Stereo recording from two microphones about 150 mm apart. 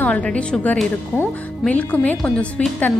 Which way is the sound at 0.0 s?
10° left (ahead or behind).